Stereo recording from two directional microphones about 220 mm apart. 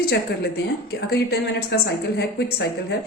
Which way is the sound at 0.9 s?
45° left (ahead or behind).